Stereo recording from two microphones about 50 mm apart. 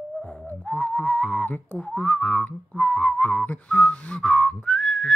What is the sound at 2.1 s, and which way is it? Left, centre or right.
Whistling, left.